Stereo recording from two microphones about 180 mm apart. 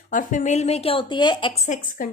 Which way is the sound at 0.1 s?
45° left (ahead or behind).